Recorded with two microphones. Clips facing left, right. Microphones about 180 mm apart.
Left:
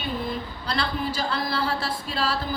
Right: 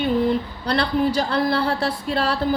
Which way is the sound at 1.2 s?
60° right (ahead or behind).